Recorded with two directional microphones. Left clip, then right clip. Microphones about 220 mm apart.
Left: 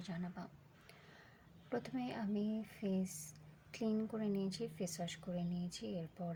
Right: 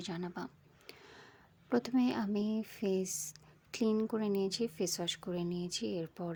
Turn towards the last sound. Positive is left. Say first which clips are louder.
# right 7 dB
turn(degrees=-40)  # may be behind; listen again after turning